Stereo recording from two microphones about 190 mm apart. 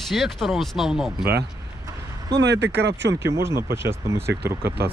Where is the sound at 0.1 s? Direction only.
Centre (ahead or behind).